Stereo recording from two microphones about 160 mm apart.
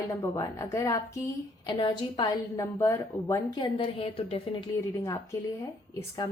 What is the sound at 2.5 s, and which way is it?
A woman's voice, 20° left (ahead or behind).